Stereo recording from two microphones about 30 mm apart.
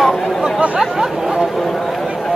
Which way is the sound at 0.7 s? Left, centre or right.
Centre.